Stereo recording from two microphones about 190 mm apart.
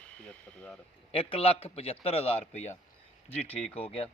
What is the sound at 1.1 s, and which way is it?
A man's voice, 30° left (ahead or behind).